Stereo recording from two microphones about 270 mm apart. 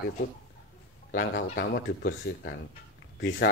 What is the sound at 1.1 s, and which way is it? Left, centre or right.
Speech, left.